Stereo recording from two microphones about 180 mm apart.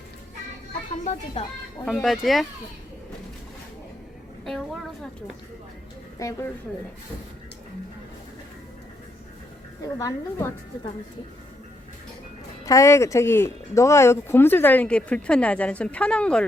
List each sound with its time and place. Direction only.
1.4 s a woman's voice: 35° left (ahead or behind)
1.8 s speech: centre (ahead or behind)
4.4 s speech: centre (ahead or behind)
6.2 s speech: 15° left (ahead or behind)
9.8 s speech: 15° left (ahead or behind)
12.6 s speech: 15° left (ahead or behind)